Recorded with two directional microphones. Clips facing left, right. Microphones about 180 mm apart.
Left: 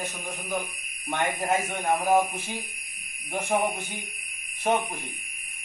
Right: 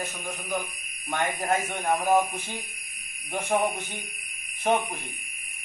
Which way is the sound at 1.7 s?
15° left (ahead or behind).